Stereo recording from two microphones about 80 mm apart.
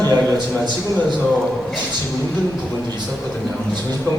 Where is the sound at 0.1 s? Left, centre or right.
Right.